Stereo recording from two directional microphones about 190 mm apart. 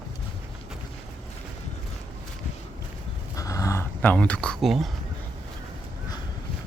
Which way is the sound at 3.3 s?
15° left (ahead or behind).